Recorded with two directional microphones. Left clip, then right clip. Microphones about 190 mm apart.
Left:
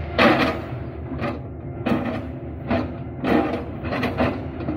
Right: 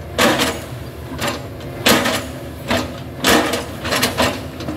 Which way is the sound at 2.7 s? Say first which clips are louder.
Right 5 dB; 35° right (ahead or behind).